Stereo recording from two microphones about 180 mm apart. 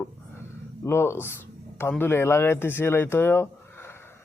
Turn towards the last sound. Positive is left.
turn(degrees=15)  # may be behind; listen again after turning